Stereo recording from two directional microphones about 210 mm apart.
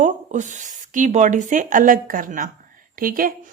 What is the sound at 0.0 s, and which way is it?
Speech, 35° right (ahead or behind).